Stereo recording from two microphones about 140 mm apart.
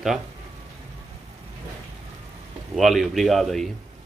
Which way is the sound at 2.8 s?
Centre (ahead or behind).